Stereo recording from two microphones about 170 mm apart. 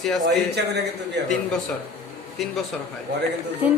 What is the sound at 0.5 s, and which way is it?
Speech, 80° right.